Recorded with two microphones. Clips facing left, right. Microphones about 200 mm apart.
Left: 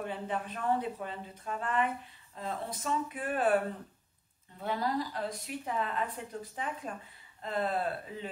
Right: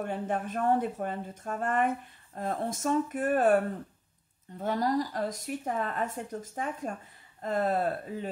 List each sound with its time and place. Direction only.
0.0 s speech: 45° right (ahead or behind)